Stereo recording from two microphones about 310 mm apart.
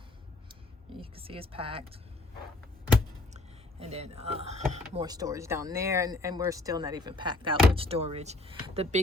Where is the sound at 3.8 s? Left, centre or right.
Centre.